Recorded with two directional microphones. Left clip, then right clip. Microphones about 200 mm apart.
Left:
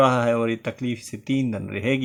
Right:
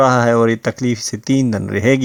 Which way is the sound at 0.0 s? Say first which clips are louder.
Right 7 dB; 40° right (ahead or behind).